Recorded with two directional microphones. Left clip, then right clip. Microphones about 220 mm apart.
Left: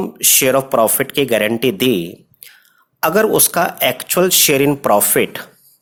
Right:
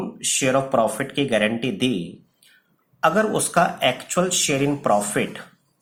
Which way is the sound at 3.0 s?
45° left (ahead or behind).